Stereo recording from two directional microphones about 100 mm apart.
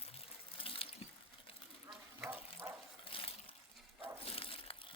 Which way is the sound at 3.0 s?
65° left (ahead or behind).